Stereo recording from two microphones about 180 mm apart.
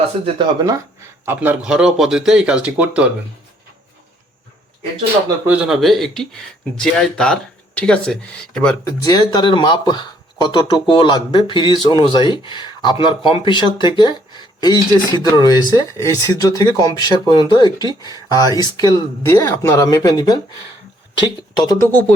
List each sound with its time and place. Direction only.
0.3 s speech: 25° right (ahead or behind)
1.2 s speech: 10° right (ahead or behind)
5.5 s speech: 5° right (ahead or behind)
8.9 s speech: 20° left (ahead or behind)